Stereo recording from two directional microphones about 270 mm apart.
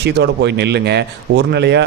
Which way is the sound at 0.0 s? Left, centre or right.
Right.